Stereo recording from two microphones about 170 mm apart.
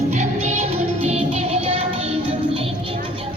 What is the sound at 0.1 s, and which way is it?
Music, 40° right (ahead or behind).